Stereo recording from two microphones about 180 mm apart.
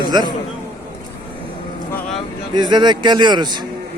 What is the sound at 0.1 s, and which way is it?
Speech, 25° right (ahead or behind).